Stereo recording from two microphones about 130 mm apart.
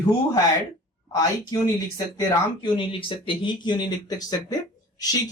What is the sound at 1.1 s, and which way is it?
Speech, 25° left (ahead or behind).